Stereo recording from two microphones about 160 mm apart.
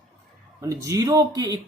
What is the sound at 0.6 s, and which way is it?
Speech, 20° right (ahead or behind).